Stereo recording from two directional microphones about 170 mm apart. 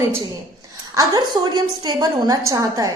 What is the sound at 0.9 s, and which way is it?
A woman's voice, 25° right (ahead or behind).